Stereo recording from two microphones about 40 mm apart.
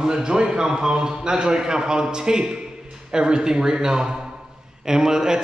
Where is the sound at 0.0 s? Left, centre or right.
Centre.